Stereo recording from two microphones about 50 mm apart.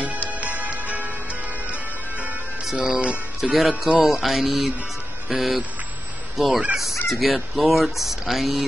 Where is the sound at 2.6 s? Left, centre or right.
Centre.